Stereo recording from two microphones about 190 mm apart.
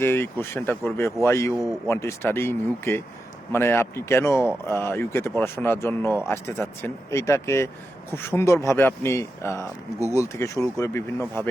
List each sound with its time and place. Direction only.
0.0 s speech: 10° left (ahead or behind)